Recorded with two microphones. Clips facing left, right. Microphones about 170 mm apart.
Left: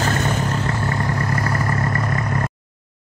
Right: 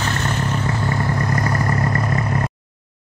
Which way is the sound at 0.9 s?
10° right (ahead or behind).